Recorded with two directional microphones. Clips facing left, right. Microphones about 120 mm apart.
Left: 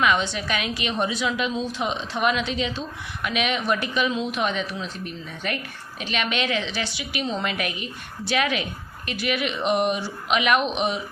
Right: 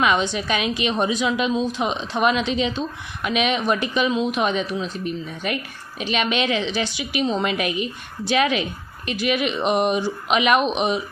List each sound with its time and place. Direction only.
0.0 s a woman's voice: 20° right (ahead or behind)